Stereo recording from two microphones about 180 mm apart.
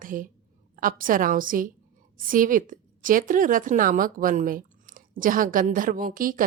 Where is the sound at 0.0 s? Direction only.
50° right (ahead or behind).